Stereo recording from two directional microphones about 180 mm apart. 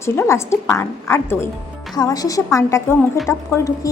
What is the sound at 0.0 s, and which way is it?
A woman's voice, 15° left (ahead or behind).